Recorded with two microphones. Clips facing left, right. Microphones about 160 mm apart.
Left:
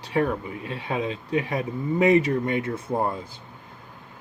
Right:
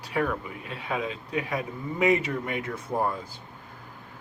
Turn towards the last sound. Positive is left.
turn(degrees=25)  # may be behind; listen again after turning